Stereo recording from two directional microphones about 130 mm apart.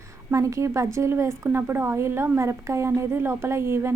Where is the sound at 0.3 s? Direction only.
25° right (ahead or behind).